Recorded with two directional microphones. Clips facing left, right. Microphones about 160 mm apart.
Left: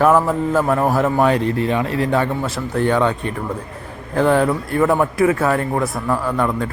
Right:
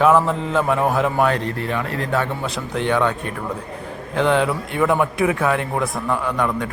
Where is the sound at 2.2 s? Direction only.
5° left (ahead or behind).